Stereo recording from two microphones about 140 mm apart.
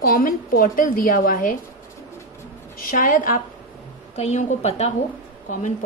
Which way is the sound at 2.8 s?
90° left.